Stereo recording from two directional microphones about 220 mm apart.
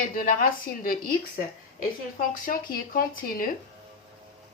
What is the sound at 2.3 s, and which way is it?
Speech, 40° left (ahead or behind).